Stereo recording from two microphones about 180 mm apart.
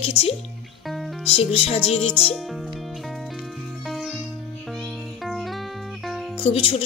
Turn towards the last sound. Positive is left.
turn(degrees=35)  # may be behind; listen again after turning